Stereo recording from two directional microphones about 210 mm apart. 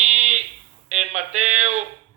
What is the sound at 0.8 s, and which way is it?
Speech, 35° right (ahead or behind).